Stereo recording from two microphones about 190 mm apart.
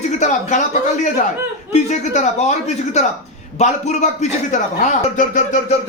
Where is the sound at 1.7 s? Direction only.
40° left (ahead or behind).